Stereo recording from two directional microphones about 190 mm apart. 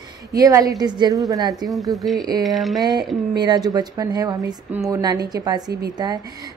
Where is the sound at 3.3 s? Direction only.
20° right (ahead or behind).